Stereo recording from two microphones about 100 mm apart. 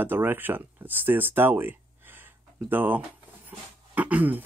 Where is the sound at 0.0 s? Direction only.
20° right (ahead or behind).